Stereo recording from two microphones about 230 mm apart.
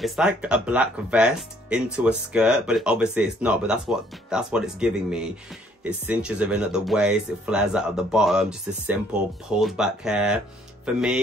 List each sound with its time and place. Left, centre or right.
0.0 s speech: centre